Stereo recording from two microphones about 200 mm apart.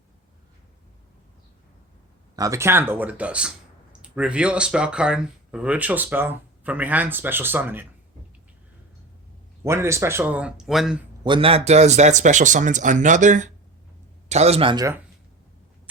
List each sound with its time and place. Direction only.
2.3 s speech: 15° right (ahead or behind)
9.6 s speech: 15° right (ahead or behind)
11.2 s speech: 25° right (ahead or behind)